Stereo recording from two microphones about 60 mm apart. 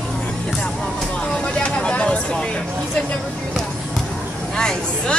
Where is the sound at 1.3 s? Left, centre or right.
Centre.